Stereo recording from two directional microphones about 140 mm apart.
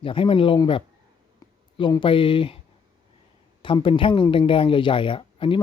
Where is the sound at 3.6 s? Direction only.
40° left (ahead or behind).